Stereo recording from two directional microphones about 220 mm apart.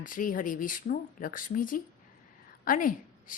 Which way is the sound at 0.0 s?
40° left (ahead or behind).